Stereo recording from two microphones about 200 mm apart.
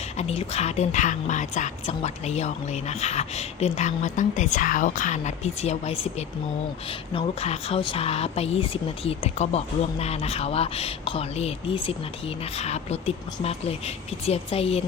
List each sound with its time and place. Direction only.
0.2 s speech: 30° left (ahead or behind)